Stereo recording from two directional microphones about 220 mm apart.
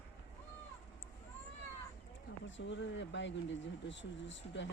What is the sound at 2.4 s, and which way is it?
Speech, 55° left (ahead or behind).